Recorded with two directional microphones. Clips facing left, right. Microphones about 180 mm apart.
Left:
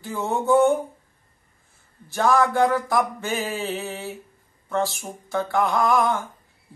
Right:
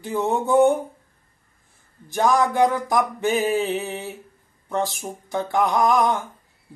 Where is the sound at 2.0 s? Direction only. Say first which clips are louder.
Even; 15° right (ahead or behind).